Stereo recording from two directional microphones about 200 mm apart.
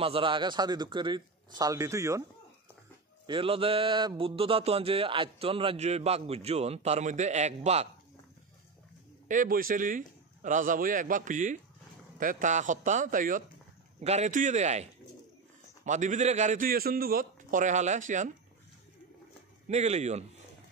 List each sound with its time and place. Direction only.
0.0 s speech: 25° right (ahead or behind)
3.3 s speech: 25° right (ahead or behind)
9.3 s a man's voice: 45° right (ahead or behind)
19.7 s a man's voice: 35° right (ahead or behind)